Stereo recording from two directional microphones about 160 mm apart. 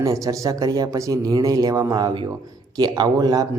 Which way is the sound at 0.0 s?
20° right (ahead or behind).